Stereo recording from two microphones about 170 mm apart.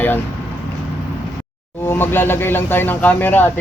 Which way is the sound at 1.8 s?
10° left (ahead or behind).